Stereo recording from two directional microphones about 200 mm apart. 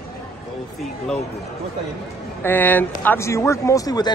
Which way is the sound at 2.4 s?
10° left (ahead or behind).